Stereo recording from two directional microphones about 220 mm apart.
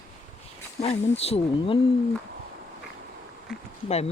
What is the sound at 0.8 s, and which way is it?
Speech, 30° left (ahead or behind).